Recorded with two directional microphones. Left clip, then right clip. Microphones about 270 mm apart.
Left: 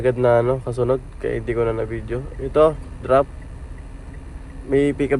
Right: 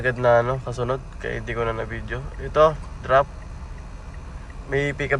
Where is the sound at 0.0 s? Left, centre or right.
Centre.